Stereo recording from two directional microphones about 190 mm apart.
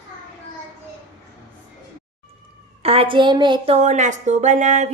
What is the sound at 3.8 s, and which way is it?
Speech, 40° right (ahead or behind).